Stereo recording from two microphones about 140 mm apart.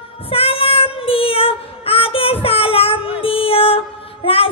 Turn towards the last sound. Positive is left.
turn(degrees=40)  # may be behind; listen again after turning